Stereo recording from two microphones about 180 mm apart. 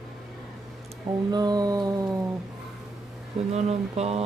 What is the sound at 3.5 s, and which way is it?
Speech, 35° right (ahead or behind).